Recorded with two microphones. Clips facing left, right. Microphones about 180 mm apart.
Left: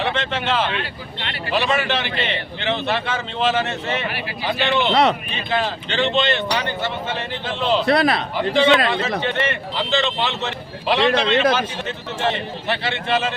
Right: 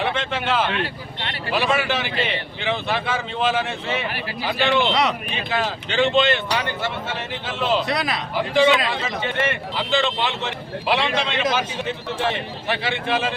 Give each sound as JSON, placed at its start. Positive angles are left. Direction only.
{"t": 0.0, "sound": "speech", "side_deg": -10}
{"t": 4.9, "sound": "a man's voice", "side_deg": 55}
{"t": 5.5, "sound": "speech", "side_deg": -10}
{"t": 7.9, "sound": "a man's voice", "side_deg": 55}
{"t": 8.5, "sound": "speech", "side_deg": -10}